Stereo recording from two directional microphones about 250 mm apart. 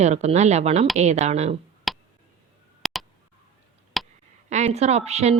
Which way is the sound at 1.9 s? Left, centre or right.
Centre.